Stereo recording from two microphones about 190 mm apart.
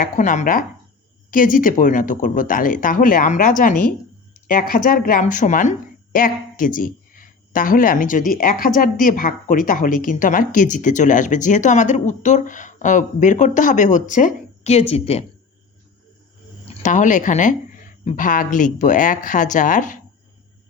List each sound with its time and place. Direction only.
0.0 s speech: 40° left (ahead or behind)
16.8 s speech: 40° left (ahead or behind)